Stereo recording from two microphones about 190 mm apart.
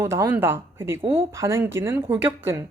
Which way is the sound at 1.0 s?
30° right (ahead or behind).